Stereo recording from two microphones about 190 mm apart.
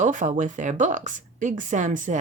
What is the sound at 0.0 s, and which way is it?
A woman's voice, 40° right (ahead or behind).